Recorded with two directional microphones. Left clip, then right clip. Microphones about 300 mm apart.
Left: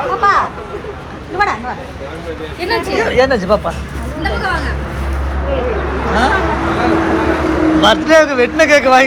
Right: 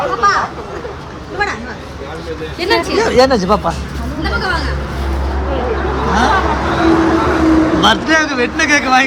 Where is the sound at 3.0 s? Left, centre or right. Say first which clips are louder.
Right 1 dB; centre.